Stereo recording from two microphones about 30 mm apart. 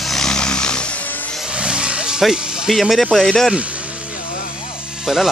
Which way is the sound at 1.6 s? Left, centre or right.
Right.